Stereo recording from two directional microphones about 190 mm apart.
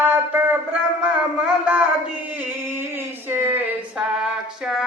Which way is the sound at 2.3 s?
10° right (ahead or behind).